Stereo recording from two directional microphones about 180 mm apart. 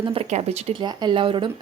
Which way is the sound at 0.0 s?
30° right (ahead or behind).